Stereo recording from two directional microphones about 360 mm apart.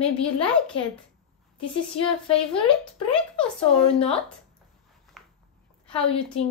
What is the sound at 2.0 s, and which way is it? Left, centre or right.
A woman's voice, centre.